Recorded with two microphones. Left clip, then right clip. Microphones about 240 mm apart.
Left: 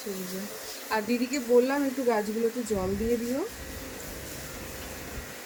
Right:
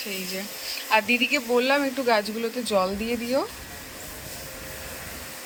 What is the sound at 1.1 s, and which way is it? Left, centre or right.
Speech, right.